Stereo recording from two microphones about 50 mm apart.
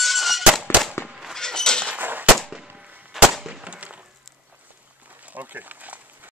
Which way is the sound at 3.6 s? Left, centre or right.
Right.